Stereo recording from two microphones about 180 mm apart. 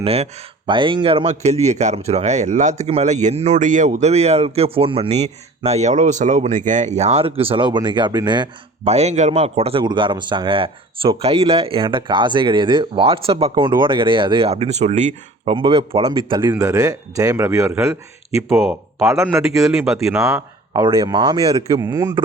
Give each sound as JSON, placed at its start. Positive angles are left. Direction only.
{"t": 0.0, "sound": "a man's voice", "side_deg": -35}
{"t": 15.5, "sound": "speech", "side_deg": -25}
{"t": 18.4, "sound": "speech", "side_deg": 0}
{"t": 19.1, "sound": "a man's voice", "side_deg": -15}
{"t": 19.7, "sound": "speech", "side_deg": -5}
{"t": 20.2, "sound": "speech", "side_deg": -20}